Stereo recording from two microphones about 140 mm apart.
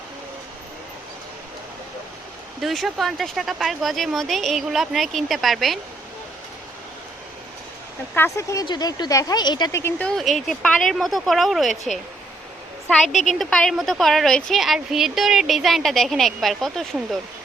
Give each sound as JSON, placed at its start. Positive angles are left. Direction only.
{"t": 2.6, "sound": "speech", "side_deg": 0}
{"t": 8.1, "sound": "speech", "side_deg": 15}
{"t": 9.7, "sound": "speech", "side_deg": 15}
{"t": 10.1, "sound": "speech", "side_deg": 0}
{"t": 13.4, "sound": "speech", "side_deg": 5}